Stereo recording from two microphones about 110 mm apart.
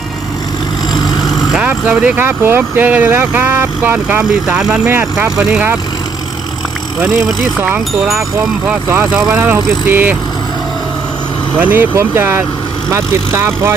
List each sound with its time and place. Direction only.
1.2 s vehicle: 5° right (ahead or behind)
2.2 s speech: 20° right (ahead or behind)
7.0 s speech: centre (ahead or behind)
9.1 s speech: 5° right (ahead or behind)
9.4 s speech: 15° right (ahead or behind)
11.5 s speech: 15° right (ahead or behind)